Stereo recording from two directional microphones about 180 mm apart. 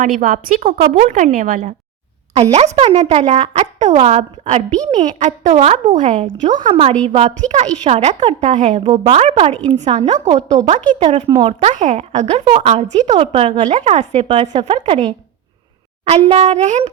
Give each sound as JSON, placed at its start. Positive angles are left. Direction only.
{"t": 0.0, "sound": "speech", "side_deg": -45}
{"t": 2.3, "sound": "a woman's voice", "side_deg": -35}
{"t": 7.1, "sound": "a woman's voice", "side_deg": -40}
{"t": 16.0, "sound": "a woman's voice", "side_deg": -35}